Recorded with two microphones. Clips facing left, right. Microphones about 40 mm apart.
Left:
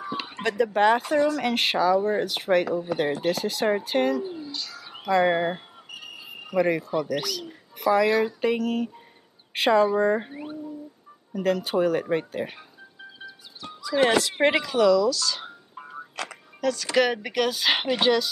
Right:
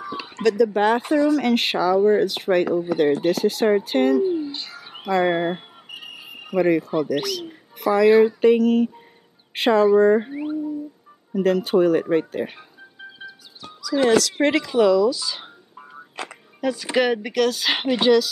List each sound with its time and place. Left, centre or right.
0.4 s speech: left
0.7 s speech: centre
4.3 s a sound: right
5.0 s speech: centre
5.9 s basketball bounce: right
6.6 s speech: centre
8.1 s speech: centre
8.4 s speech: centre
11.3 s speech: centre
13.8 s speech: left
14.8 s speech: centre
16.2 s a sound: right
17.0 s speech: centre
17.3 s speech: centre